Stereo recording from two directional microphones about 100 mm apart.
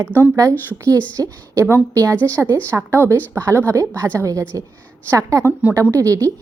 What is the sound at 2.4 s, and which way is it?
Speech, 15° left (ahead or behind).